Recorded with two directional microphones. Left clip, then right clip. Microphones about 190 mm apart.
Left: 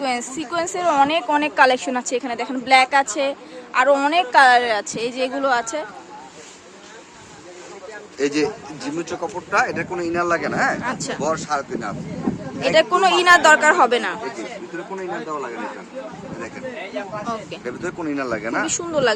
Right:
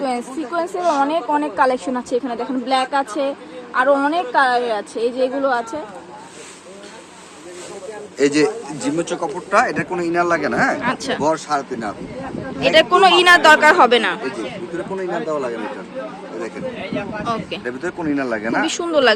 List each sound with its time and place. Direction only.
0.0 s a woman's voice: 20° left (ahead or behind)
1.7 s a man's voice: centre (ahead or behind)
2.3 s a woman's voice: 15° left (ahead or behind)
3.7 s a man's voice: 5° right (ahead or behind)
4.1 s a woman's voice: 25° left (ahead or behind)
8.2 s a man's voice: 10° right (ahead or behind)
17.2 s a man's voice: centre (ahead or behind)
17.7 s a woman's voice: 15° left (ahead or behind)
18.6 s a man's voice: centre (ahead or behind)